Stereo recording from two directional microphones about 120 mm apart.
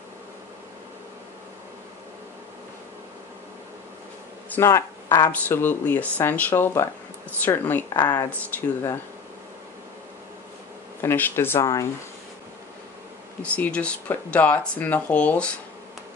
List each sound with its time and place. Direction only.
4.5 s speech: 20° left (ahead or behind)
7.9 s speech: 35° left (ahead or behind)
8.5 s speech: 15° left (ahead or behind)
11.0 s speech: 20° left (ahead or behind)
13.4 s speech: 10° left (ahead or behind)